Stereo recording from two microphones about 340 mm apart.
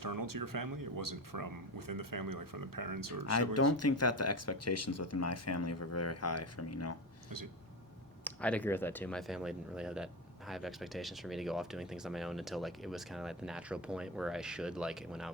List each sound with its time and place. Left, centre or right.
0.0 s speech: right
3.2 s speech: left
8.2 s speech: centre